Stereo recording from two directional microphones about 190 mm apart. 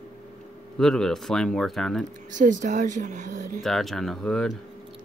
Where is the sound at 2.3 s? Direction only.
40° right (ahead or behind).